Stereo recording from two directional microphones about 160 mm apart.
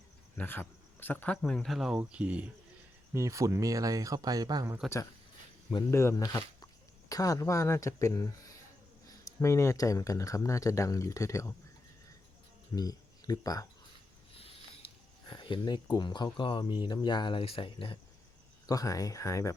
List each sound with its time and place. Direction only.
0.3 s speech: 10° left (ahead or behind); by 2.5 s 10° right (ahead or behind)
3.1 s speech: 20° right (ahead or behind)
5.9 s speech: 15° left (ahead or behind)
12.7 s speech: 25° left (ahead or behind)
14.3 s a sound: 35° left (ahead or behind)
15.3 s speech: 30° left (ahead or behind)
18.6 s speech: 20° left (ahead or behind)